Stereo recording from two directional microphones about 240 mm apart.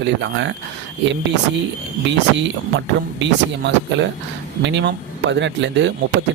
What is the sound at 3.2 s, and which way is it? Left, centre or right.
Speech, right.